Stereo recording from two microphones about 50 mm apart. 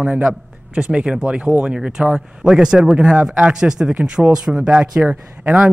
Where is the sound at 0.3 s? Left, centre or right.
Centre.